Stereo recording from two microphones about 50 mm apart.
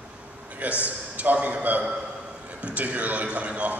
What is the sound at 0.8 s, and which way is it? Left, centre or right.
A man's voice, right.